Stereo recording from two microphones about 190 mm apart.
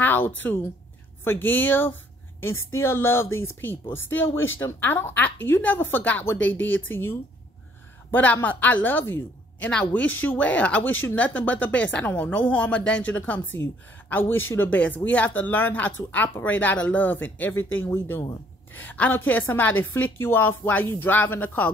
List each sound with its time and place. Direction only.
0.0 s a sound: 10° left (ahead or behind)
1.2 s speech: 10° left (ahead or behind)
6.5 s speech: 85° left
6.9 s speech: 10° left (ahead or behind)